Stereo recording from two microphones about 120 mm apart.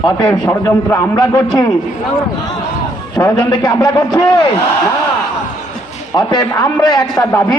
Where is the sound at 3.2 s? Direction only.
30° left (ahead or behind).